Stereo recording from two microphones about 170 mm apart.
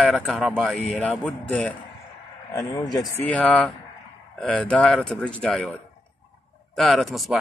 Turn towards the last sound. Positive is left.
turn(degrees=0)  # may be behind; listen again after turning